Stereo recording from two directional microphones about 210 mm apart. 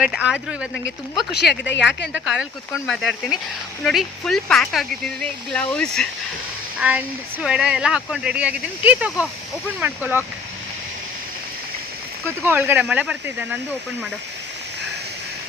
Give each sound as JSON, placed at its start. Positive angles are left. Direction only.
{"t": 0.0, "sound": "speech", "side_deg": -5}
{"t": 1.3, "sound": "speech", "side_deg": 55}
{"t": 2.7, "sound": "speech", "side_deg": 0}
{"t": 12.5, "sound": "speech", "side_deg": -10}